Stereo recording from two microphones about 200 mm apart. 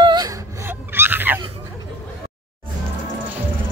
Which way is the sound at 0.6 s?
10° right (ahead or behind).